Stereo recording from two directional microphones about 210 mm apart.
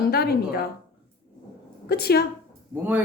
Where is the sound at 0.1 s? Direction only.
50° left (ahead or behind).